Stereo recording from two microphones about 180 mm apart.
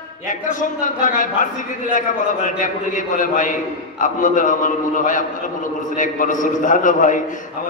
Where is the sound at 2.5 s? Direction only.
45° left (ahead or behind).